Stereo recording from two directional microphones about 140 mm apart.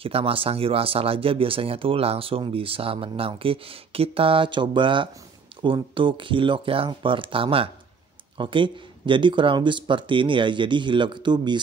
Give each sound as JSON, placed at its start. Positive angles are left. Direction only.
{"t": 0.0, "sound": "speech", "side_deg": -40}